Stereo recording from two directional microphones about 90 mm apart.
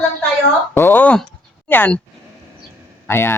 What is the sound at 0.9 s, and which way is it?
Speech, 20° left (ahead or behind).